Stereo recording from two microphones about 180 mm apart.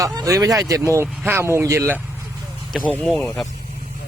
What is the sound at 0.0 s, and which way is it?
Speech, 20° right (ahead or behind).